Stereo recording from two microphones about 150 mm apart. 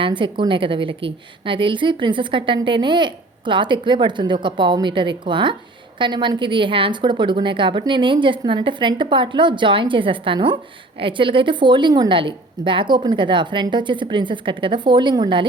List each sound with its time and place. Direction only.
0.0 s a woman's voice: 35° right (ahead or behind)